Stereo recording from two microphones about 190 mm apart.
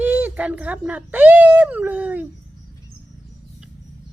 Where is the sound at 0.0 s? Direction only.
10° right (ahead or behind).